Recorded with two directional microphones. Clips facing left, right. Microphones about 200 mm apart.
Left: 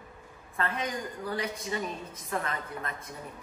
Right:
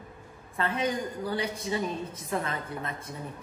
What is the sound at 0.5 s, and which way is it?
A woman's voice, 30° right (ahead or behind).